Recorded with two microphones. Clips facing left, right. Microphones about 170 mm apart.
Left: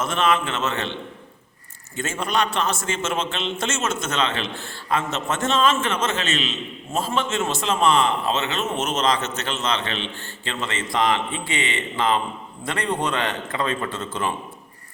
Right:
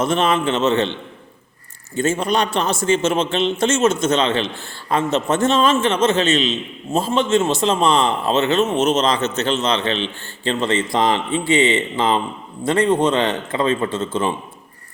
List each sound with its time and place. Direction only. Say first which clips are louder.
0.0 s a man's voice: right 4 dB; 30° right (ahead or behind)
2.0 s a man's voice: right 6 dB; 35° right (ahead or behind)